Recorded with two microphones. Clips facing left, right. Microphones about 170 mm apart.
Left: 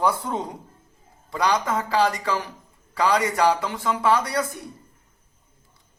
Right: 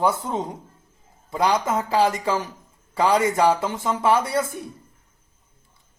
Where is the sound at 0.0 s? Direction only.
25° right (ahead or behind).